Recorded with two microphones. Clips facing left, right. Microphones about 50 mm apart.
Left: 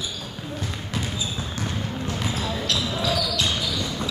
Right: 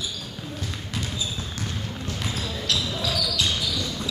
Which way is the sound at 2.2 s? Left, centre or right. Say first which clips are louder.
Left 1 dB; centre.